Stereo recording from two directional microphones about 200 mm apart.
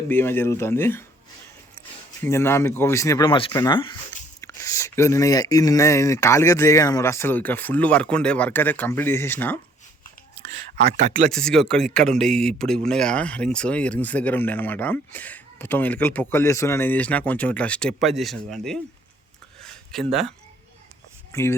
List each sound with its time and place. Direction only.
0.1 s speech: 10° left (ahead or behind)
2.2 s speech: 10° left (ahead or behind)
10.8 s speech: 35° right (ahead or behind)
11.3 s speech: 5° left (ahead or behind)
19.6 s a sound: centre (ahead or behind)
21.3 s speech: 15° left (ahead or behind)